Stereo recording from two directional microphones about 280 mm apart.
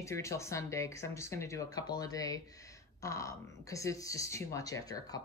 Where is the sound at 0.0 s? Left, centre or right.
Centre.